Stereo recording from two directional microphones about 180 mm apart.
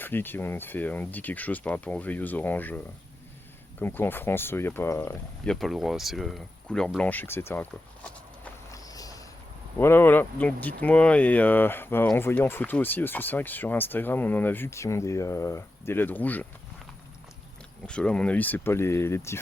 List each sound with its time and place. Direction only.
0.0 s speech: 10° left (ahead or behind)
5.5 s speech: centre (ahead or behind)
8.7 s cricket: 20° left (ahead or behind)
9.7 s speech: 10° left (ahead or behind)
17.8 s speech: 5° left (ahead or behind)